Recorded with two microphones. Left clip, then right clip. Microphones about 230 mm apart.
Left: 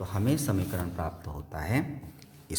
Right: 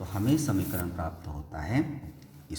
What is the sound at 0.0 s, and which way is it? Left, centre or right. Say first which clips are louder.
A man's voice: right 2 dB; left.